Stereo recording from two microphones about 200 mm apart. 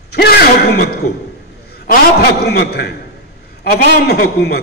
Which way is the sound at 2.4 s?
55° left (ahead or behind).